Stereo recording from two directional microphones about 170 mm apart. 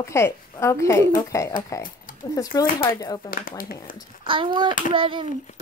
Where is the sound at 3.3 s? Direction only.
55° left (ahead or behind).